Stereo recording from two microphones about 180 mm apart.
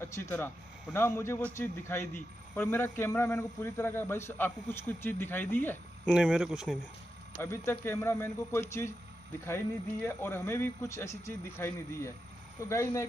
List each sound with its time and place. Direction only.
0.0 s a man's voice: 15° left (ahead or behind)
6.0 s speech: 5° right (ahead or behind)
7.3 s a man's voice: 15° left (ahead or behind)
10.0 s a man's voice: 15° left (ahead or behind)